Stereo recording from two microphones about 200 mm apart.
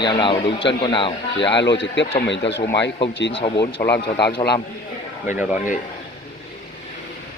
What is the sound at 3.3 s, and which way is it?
Speech, 30° left (ahead or behind).